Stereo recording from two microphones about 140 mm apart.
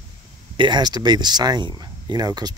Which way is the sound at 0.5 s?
30° right (ahead or behind).